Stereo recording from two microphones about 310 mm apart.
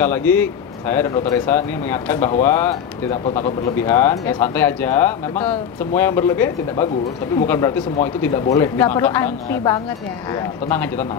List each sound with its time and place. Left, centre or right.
0.0 s speech: centre